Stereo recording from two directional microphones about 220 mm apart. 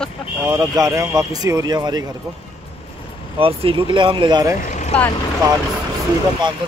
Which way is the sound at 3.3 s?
25° right (ahead or behind).